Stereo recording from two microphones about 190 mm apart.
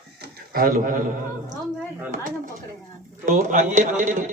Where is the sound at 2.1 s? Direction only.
45° right (ahead or behind).